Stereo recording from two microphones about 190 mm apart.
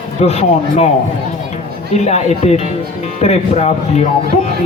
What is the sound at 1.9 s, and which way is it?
Speech, 35° left (ahead or behind).